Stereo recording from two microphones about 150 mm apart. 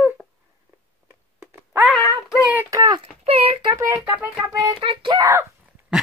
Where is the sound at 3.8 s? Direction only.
20° right (ahead or behind).